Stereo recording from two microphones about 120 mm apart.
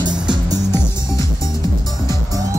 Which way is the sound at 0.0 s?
35° right (ahead or behind).